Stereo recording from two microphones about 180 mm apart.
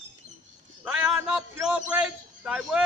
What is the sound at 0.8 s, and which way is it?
A man's voice, 10° right (ahead or behind).